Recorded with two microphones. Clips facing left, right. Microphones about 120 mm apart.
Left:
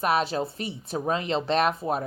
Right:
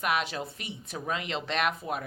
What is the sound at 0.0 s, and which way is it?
Speech, 35° left (ahead or behind).